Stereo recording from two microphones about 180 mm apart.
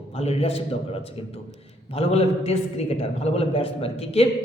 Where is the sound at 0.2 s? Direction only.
35° left (ahead or behind).